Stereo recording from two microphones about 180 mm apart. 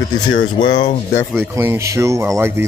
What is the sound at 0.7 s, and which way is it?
Speech, 40° left (ahead or behind).